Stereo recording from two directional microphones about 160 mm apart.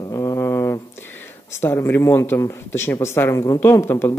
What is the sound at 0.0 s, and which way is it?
A man's voice, 20° left (ahead or behind).